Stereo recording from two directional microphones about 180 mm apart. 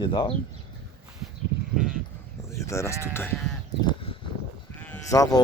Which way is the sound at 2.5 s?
15° left (ahead or behind).